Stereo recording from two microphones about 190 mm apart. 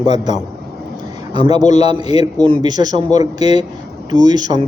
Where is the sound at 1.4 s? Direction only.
20° right (ahead or behind).